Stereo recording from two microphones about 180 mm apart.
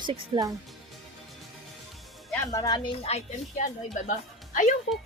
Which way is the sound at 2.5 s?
20° left (ahead or behind).